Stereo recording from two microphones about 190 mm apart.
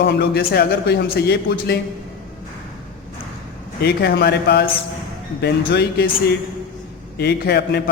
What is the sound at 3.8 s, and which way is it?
Speech, 55° left (ahead or behind).